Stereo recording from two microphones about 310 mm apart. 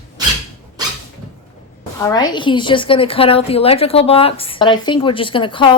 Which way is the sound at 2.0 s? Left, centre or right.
Centre.